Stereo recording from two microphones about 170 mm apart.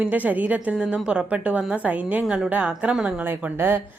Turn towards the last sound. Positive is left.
turn(degrees=-10)  # may be behind; listen again after turning